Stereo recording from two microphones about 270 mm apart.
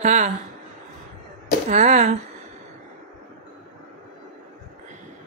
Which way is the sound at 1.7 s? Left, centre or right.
Right.